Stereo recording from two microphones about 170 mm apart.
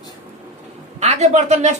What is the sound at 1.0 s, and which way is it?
Speech, 40° right (ahead or behind).